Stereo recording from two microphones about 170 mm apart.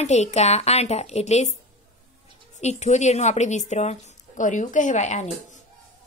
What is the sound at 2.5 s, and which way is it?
A woman's voice, 40° left (ahead or behind).